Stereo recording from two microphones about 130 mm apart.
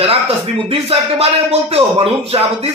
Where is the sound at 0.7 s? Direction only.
50° right (ahead or behind).